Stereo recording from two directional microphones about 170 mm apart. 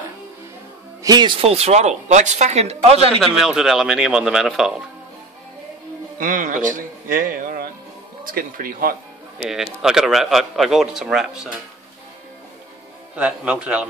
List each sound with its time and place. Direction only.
1.0 s speech: 25° right (ahead or behind)
3.3 s speech: 5° right (ahead or behind)
6.1 s a man's voice: 50° right (ahead or behind)
9.4 s speech: 5° right (ahead or behind)
13.1 s speech: 5° right (ahead or behind)